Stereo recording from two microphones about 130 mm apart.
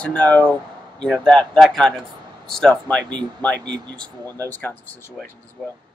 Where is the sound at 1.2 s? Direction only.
Centre (ahead or behind).